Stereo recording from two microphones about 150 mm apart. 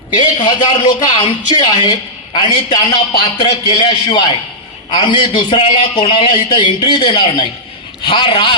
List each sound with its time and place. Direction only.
0.2 s a man's voice: 30° left (ahead or behind)